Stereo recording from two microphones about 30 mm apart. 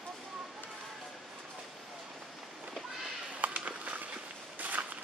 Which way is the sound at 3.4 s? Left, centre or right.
Right.